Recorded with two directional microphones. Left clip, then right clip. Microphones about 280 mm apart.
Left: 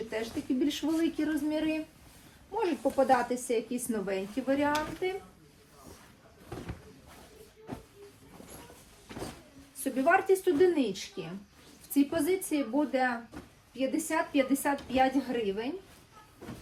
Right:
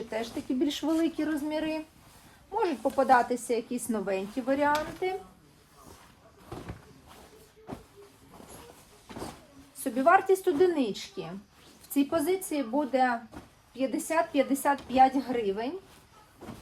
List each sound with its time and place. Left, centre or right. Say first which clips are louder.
0.1 s a woman's voice: right 2 dB; right
2.8 s a woman's voice: right 3 dB; right
9.8 s a woman's voice: right 3 dB; right